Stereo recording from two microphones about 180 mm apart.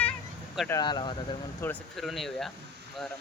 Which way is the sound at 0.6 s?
20° left (ahead or behind).